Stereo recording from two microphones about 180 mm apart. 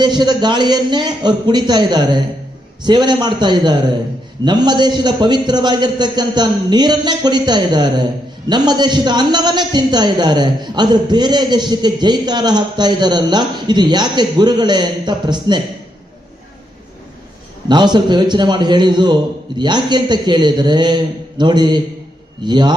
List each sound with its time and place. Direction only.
0.0 s a man's voice: 25° right (ahead or behind)
17.7 s a man's voice: 25° right (ahead or behind)